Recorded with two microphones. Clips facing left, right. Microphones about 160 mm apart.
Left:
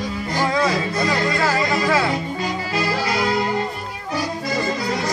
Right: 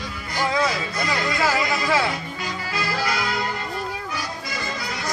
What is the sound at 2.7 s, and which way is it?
Music, 30° left (ahead or behind).